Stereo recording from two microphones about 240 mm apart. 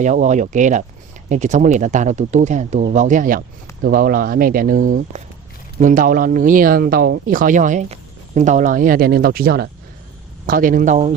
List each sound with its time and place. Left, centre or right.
0.0 s speech: right